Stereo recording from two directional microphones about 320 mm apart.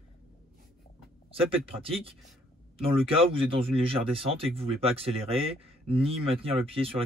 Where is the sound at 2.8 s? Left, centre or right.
Centre.